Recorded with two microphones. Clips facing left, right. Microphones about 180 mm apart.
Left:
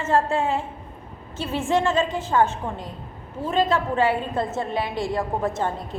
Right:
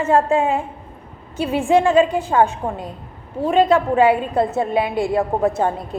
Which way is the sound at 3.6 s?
15° right (ahead or behind).